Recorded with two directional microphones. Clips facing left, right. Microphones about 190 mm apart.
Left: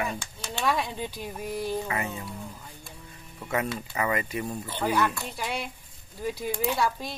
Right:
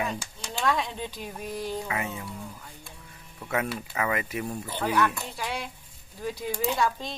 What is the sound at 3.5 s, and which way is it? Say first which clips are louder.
Speech: even; 5° right (ahead or behind).